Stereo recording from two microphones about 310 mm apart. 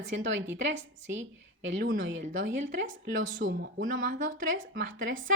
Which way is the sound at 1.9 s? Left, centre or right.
Right.